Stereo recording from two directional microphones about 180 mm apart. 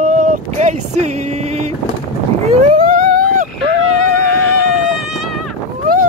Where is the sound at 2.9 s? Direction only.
45° right (ahead or behind).